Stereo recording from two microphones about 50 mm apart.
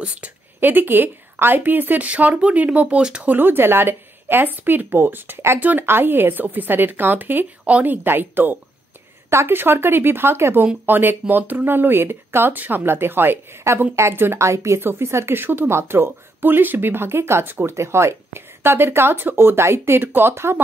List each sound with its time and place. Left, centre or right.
0.0 s speech: right
0.6 s speech: right; by 3.3 s centre
3.3 s speech: right
5.9 s speech: right
9.3 s speech: right
9.6 s speech: right
14.8 s speech: right
15.3 s speech: right
17.7 s speech: right